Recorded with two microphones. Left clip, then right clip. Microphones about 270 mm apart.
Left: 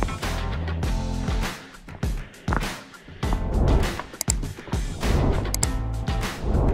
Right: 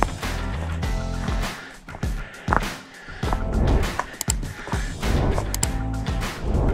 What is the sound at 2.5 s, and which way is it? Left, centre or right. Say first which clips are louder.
Music: right 6 dB; centre.